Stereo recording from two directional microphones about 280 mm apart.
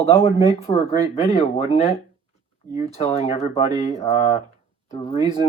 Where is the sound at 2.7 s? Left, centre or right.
Left.